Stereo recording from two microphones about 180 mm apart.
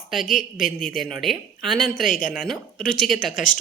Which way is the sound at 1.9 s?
50° left (ahead or behind).